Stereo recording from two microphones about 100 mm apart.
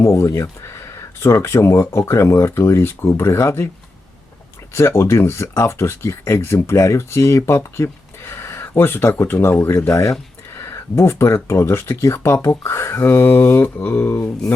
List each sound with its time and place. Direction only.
0.0 s speech: 30° left (ahead or behind)
4.7 s speech: 25° left (ahead or behind)